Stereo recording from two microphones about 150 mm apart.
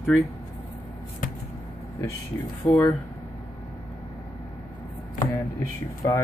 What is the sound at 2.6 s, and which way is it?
Speech, 20° left (ahead or behind).